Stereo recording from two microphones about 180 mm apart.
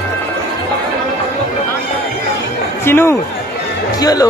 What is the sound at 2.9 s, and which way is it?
A woman's voice, 15° left (ahead or behind).